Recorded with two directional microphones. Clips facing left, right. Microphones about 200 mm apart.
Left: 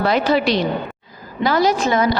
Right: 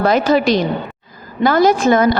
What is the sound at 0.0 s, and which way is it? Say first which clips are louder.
A woman's voice: right 3 dB; 45° right (ahead or behind).